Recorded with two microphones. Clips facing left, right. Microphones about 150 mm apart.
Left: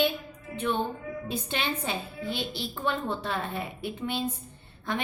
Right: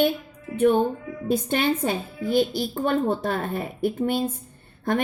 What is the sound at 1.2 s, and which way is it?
A woman's voice, 50° right (ahead or behind).